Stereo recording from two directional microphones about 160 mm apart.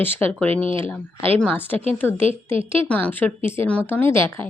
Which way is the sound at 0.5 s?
35° right (ahead or behind).